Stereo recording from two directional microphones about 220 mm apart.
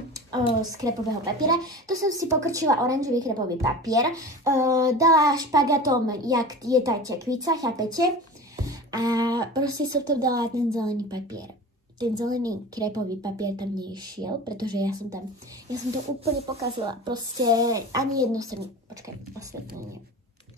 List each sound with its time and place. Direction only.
0.1 s a woman's voice: 20° right (ahead or behind)
8.5 s music: 15° right (ahead or behind)
9.6 s a woman's voice: 15° right (ahead or behind)
16.5 s a woman's voice: 20° right (ahead or behind)